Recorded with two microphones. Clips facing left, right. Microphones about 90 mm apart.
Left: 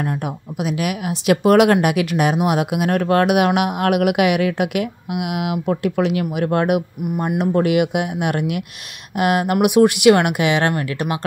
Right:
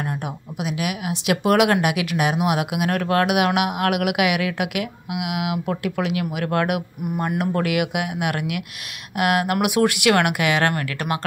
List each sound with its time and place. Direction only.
0.6 s speech: 45° left (ahead or behind); by 11.1 s 20° left (ahead or behind)